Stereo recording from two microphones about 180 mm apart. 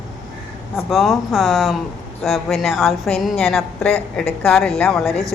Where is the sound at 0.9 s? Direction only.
Centre (ahead or behind).